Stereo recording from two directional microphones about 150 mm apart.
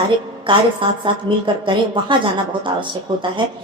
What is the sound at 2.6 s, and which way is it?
Speech, 35° right (ahead or behind).